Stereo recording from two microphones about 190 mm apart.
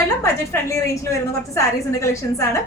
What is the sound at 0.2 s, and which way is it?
Speech, 15° left (ahead or behind).